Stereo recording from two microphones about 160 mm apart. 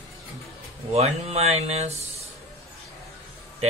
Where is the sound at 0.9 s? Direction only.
40° right (ahead or behind).